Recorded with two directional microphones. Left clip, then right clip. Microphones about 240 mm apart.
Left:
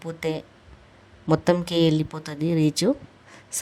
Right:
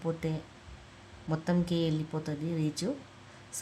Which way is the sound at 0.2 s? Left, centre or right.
Left.